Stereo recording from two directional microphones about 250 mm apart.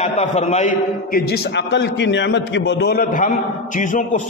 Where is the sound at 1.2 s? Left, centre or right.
Left.